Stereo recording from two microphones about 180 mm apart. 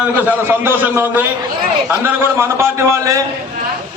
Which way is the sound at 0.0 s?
10° right (ahead or behind).